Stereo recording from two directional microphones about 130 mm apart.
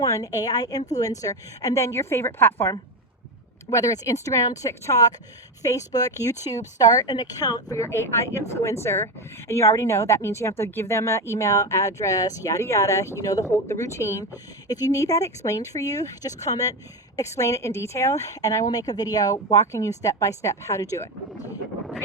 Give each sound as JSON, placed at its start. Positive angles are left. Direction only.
{"t": 0.0, "sound": "speech", "side_deg": 25}